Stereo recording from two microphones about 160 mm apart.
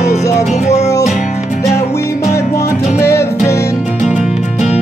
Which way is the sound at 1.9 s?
15° left (ahead or behind).